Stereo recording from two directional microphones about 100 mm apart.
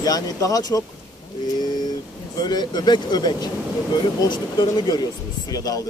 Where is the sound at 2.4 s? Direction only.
45° left (ahead or behind).